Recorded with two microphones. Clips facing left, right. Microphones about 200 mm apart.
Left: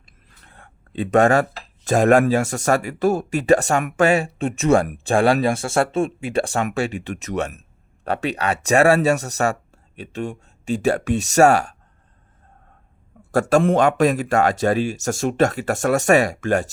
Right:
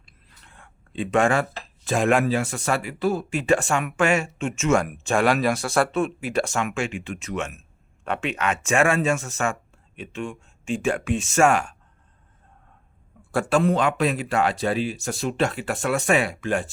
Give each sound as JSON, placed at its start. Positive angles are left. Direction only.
{"t": 0.0, "sound": "speech", "side_deg": 40}
{"t": 13.2, "sound": "a sound", "side_deg": 45}
{"t": 13.5, "sound": "speech", "side_deg": 45}